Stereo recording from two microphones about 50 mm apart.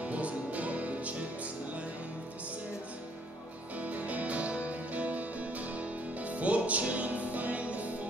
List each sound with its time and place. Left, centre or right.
0.0 s music: right
3.7 s music: right